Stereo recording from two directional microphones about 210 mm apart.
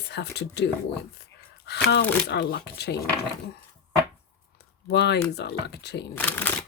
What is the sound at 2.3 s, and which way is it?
Speech, 50° left (ahead or behind).